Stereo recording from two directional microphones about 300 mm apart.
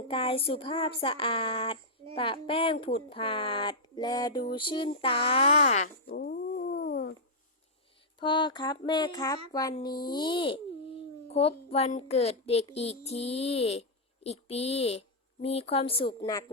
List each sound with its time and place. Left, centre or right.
0.1 s speech: centre
8.2 s a child's voice: centre